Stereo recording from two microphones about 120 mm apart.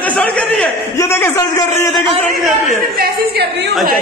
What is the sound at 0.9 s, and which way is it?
Speech, 20° left (ahead or behind).